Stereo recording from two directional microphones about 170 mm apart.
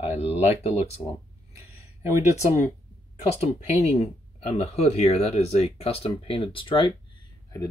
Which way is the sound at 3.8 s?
40° left (ahead or behind).